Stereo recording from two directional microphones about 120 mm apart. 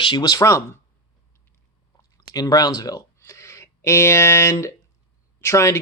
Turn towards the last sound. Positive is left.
turn(degrees=25)  # may be behind; listen again after turning